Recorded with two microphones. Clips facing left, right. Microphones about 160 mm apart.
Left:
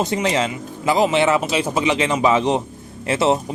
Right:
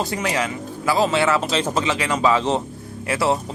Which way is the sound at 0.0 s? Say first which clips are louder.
Left 3 dB; 25° left (ahead or behind).